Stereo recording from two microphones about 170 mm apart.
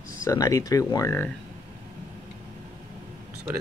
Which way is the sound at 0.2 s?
20° left (ahead or behind).